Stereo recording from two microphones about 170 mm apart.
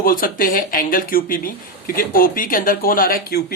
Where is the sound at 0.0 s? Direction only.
55° left (ahead or behind).